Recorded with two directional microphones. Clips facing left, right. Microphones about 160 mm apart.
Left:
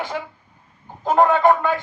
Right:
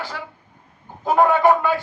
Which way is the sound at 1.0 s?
5° right (ahead or behind).